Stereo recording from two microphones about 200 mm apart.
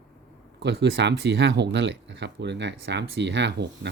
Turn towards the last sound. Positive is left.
turn(degrees=-60)  # may be behind; listen again after turning